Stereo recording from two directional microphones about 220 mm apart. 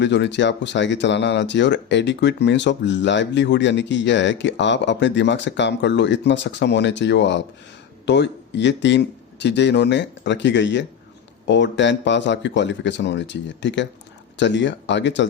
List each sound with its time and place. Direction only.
0.0 s speech: 55° left (ahead or behind)